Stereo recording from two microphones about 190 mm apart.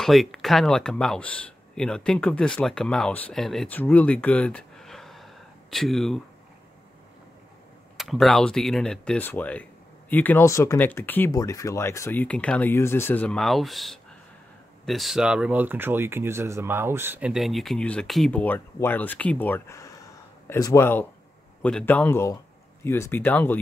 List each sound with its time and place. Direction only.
0.0 s speech: centre (ahead or behind)
8.0 s speech: centre (ahead or behind)